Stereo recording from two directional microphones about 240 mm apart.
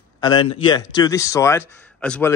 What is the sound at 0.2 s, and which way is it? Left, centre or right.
A man's voice, centre.